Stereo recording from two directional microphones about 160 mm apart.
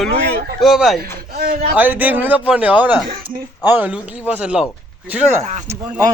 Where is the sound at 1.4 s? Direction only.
70° right (ahead or behind).